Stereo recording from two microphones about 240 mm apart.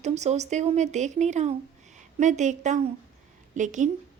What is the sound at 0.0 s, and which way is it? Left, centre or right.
A woman's voice, right.